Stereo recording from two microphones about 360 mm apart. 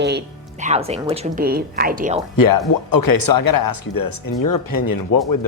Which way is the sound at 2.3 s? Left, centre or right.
Left.